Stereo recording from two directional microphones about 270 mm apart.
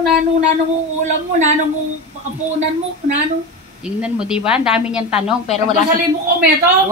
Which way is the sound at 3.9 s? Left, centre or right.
Centre.